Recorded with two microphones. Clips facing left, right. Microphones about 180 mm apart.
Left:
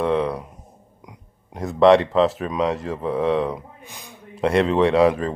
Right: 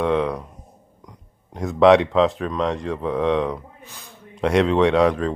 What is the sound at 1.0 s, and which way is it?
Speech, 10° left (ahead or behind).